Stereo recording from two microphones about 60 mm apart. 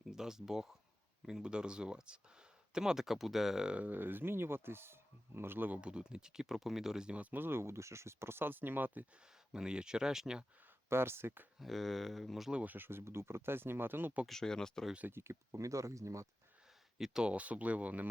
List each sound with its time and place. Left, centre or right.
0.0 s speech: centre
3.7 s speech: right
5.8 s speech: centre; by 9.0 s right
9.5 s speech: centre
10.8 s speech: right
11.6 s speech: centre
12.6 s speech: right
14.3 s speech: centre
15.1 s speech: right
17.0 s speech: centre
17.3 s speech: right